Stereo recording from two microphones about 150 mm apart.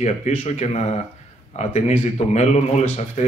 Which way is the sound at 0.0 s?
50° left (ahead or behind).